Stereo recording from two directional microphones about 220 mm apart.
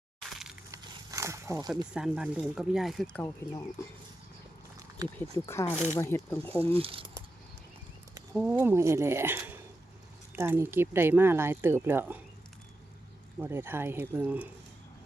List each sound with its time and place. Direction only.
0.7 s a sound: 15° right (ahead or behind)
1.9 s speech: 5° right (ahead or behind)
5.1 s speech: 10° left (ahead or behind)
6.7 s speech: 25° right (ahead or behind)
8.3 s speech: centre (ahead or behind)
13.4 s speech: 10° right (ahead or behind)